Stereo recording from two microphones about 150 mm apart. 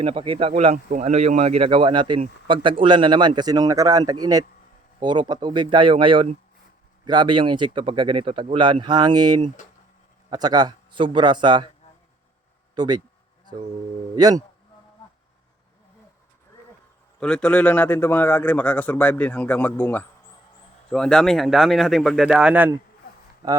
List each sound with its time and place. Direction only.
0.0 s speech: 40° right (ahead or behind)
12.7 s speech: 30° right (ahead or behind)
14.2 s speech: 25° right (ahead or behind)
17.2 s a man's voice: 5° left (ahead or behind)